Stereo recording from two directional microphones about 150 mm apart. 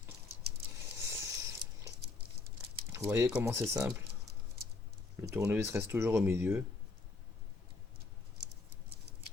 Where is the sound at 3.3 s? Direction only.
15° right (ahead or behind).